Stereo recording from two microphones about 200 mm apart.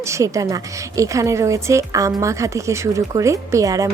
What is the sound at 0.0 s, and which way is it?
A woman's voice, 15° right (ahead or behind).